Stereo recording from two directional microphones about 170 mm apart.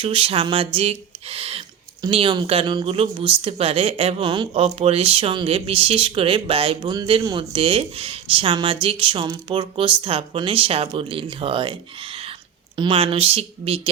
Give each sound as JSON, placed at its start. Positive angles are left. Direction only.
{"t": 0.0, "sound": "speech", "side_deg": -30}